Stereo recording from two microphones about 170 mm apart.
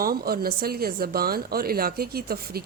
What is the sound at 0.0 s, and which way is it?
A woman's voice, 60° right (ahead or behind).